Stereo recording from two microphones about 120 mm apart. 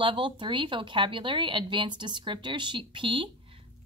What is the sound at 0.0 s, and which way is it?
Speech, 45° right (ahead or behind).